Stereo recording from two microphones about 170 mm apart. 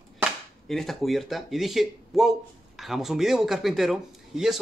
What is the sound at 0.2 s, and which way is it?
A man's voice, centre (ahead or behind).